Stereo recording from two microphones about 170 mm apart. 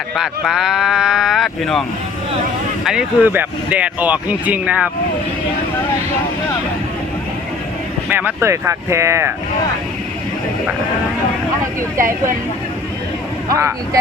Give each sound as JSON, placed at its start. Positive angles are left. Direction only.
{"t": 0.2, "sound": "speech", "side_deg": -5}
{"t": 2.8, "sound": "speech", "side_deg": -5}
{"t": 8.1, "sound": "speech", "side_deg": -15}
{"t": 11.6, "sound": "speech", "side_deg": -15}
{"t": 13.5, "sound": "speech", "side_deg": -20}